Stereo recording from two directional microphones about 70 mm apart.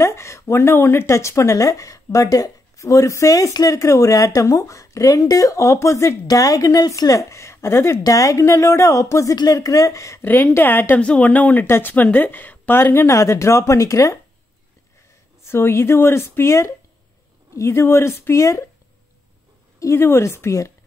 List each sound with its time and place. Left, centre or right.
0.0 s speech: left
6.2 s speech: left
8.0 s speech: left
9.3 s speech: left
10.2 s speech: left
11.0 s speech: centre
11.6 s speech: left
13.1 s speech: left
15.4 s speech: left
19.8 s speech: left